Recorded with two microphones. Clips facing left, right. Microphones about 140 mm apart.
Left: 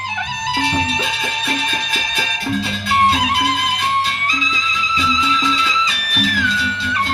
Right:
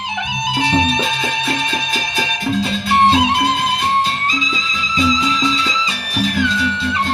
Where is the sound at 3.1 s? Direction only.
25° right (ahead or behind).